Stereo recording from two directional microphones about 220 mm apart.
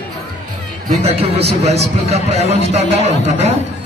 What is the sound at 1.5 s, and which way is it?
A man's voice, 30° right (ahead or behind).